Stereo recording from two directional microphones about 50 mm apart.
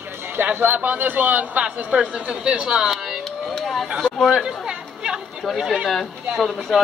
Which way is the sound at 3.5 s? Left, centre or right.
Centre.